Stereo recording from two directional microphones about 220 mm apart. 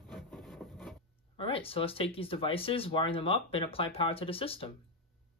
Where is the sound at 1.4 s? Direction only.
25° left (ahead or behind).